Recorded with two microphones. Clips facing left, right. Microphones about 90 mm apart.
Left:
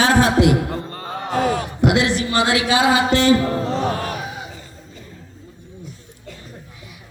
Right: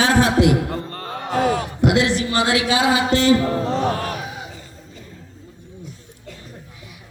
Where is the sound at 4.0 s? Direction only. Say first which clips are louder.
Even; 15° left (ahead or behind).